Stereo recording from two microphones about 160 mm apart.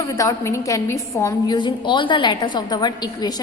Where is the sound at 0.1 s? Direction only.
20° left (ahead or behind).